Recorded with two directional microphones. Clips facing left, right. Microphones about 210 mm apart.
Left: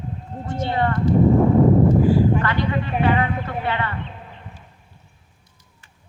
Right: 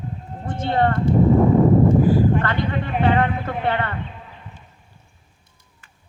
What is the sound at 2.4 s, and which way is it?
A man's voice, 55° right (ahead or behind).